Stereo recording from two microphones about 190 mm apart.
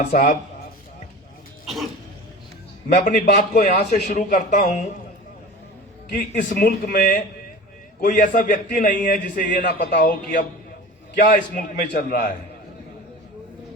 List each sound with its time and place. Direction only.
0.1 s a man's voice: 40° left (ahead or behind)
1.6 s cough: centre (ahead or behind)
2.9 s a man's voice: 40° left (ahead or behind)
6.1 s a man's voice: 50° left (ahead or behind)